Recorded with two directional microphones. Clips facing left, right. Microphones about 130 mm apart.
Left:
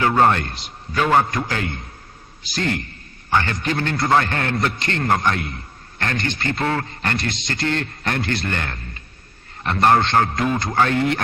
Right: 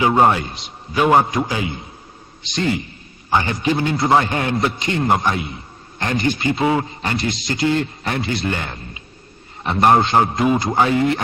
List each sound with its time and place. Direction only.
0.0 s a man's voice: 15° right (ahead or behind)
0.9 s a man's voice: 15° right (ahead or behind)
3.3 s a man's voice: 15° right (ahead or behind)